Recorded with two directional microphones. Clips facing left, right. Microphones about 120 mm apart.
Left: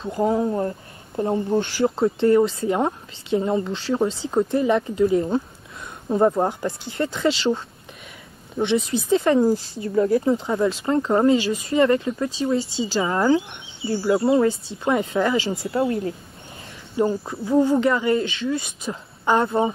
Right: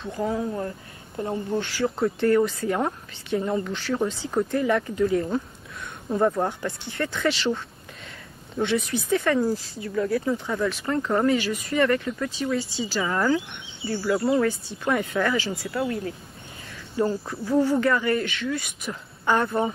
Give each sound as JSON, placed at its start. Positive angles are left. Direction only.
{"t": 0.2, "sound": "speech", "side_deg": 30}
{"t": 16.9, "sound": "speech", "side_deg": 20}